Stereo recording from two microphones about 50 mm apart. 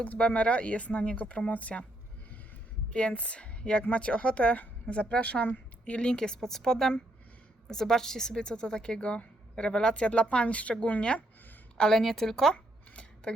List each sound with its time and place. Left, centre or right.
0.0 s speech: left
2.9 s a woman's voice: left
11.8 s a woman's voice: centre
12.5 s a sound: left